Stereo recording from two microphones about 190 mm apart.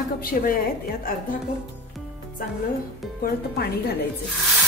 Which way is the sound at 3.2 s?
55° left (ahead or behind).